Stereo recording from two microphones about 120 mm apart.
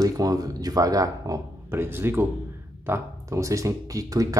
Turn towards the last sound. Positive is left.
turn(degrees=-30)  # may be behind; listen again after turning